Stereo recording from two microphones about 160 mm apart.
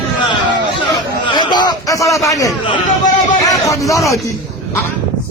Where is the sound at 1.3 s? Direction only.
30° left (ahead or behind).